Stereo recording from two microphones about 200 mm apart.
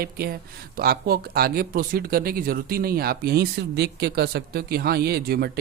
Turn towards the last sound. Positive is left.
turn(degrees=-50)  # may be behind; listen again after turning